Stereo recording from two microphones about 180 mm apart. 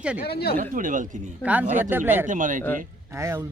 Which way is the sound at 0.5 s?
50° right (ahead or behind).